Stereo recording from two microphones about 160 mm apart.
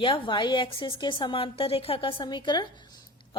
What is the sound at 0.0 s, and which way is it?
A woman's voice, 30° left (ahead or behind).